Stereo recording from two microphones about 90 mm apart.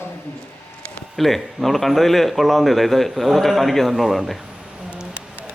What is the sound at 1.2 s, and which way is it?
Speech, centre (ahead or behind).